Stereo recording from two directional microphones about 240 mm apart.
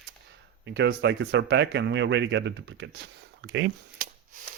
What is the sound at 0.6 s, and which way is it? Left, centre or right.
Speech, right.